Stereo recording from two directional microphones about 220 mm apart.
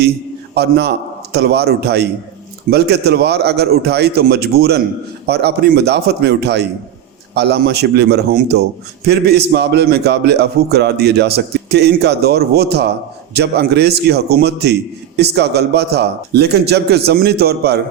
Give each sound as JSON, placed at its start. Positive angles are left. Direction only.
{"t": 0.5, "sound": "a man's voice", "side_deg": -50}